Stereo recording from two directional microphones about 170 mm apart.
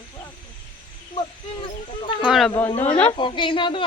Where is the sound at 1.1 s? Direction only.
30° left (ahead or behind).